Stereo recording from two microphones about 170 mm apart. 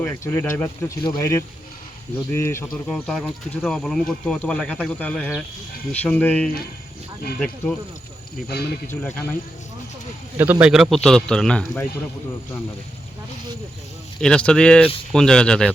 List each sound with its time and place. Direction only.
0.0 s speech: 10° left (ahead or behind)
2.9 s speech: centre (ahead or behind)
8.5 s speech: 70° left (ahead or behind)
8.9 s speech: 15° left (ahead or behind)
10.3 s speech: 10° right (ahead or behind); by 11.9 s 5° left (ahead or behind)
14.2 s speech: 5° left (ahead or behind)